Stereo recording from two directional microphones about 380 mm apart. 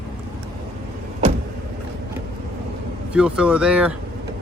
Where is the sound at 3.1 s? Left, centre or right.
Centre.